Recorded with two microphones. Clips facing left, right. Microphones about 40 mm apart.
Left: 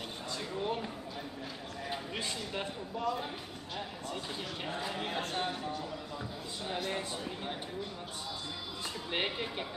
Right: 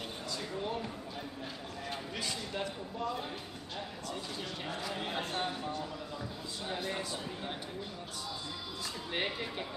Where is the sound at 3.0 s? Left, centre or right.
Centre.